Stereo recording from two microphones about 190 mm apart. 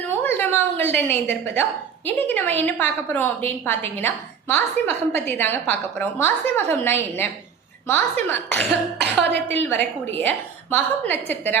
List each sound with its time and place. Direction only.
0.2 s a woman's voice: 10° left (ahead or behind)
9.0 s a woman's voice: 65° right (ahead or behind)
9.5 s a woman's voice: 10° left (ahead or behind)